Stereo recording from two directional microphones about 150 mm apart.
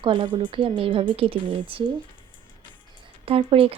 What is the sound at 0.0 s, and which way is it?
Speech, 30° right (ahead or behind).